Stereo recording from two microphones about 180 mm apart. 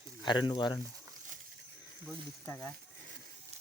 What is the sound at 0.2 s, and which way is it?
Speech, 25° left (ahead or behind).